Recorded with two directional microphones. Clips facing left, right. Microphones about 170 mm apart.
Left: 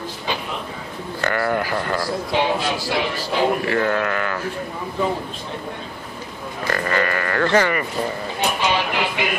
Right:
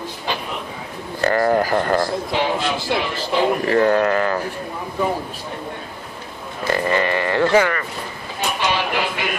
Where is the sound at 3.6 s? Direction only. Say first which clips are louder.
Right 5 dB; 35° right (ahead or behind).